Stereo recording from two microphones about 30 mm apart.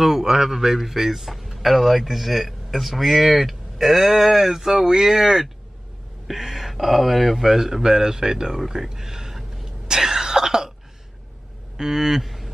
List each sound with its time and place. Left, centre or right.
0.0 s speech: centre
9.8 s throat clearing: centre
11.7 s a sound: centre